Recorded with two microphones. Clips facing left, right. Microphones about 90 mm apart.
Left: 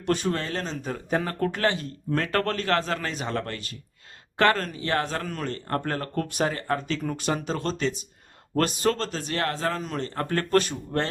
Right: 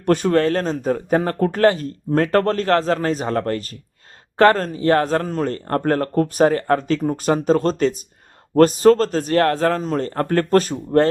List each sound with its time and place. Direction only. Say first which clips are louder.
0.0 s speech: right 10 dB; 50° right (ahead or behind)